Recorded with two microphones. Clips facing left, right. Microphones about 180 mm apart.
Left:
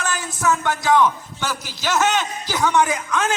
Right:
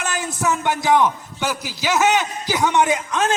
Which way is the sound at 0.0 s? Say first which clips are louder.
Even; 20° right (ahead or behind).